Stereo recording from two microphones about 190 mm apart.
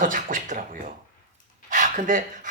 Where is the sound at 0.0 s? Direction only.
45° right (ahead or behind).